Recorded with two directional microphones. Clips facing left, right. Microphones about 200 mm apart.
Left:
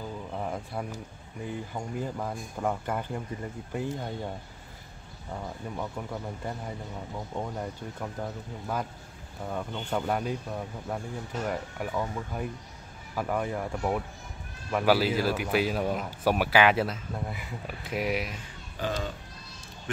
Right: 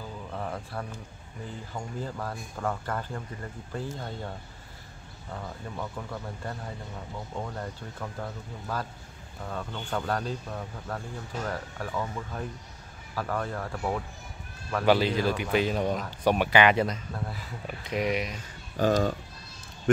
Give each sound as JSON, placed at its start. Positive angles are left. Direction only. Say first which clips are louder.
{"t": 0.3, "sound": "a sound", "louder": "even", "side_deg": 15}
{"t": 1.7, "sound": "speech", "louder": "left 2 dB", "side_deg": 15}
{"t": 5.3, "sound": "a man's voice", "louder": "left 2 dB", "side_deg": 10}
{"t": 18.8, "sound": "a child's voice", "louder": "right 8 dB", "side_deg": -45}